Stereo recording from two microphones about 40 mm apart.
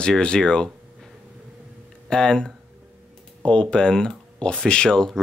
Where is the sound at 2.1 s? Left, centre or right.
Centre.